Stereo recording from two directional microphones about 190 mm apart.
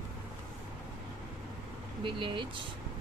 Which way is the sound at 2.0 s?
25° right (ahead or behind).